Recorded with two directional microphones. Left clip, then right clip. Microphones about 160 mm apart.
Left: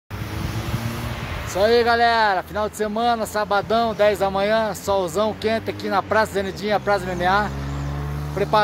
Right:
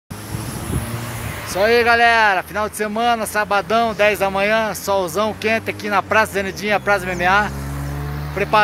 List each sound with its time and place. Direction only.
1.6 s speech: 15° right (ahead or behind)